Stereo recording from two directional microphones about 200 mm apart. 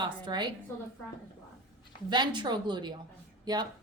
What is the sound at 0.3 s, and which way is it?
Speech, 20° right (ahead or behind).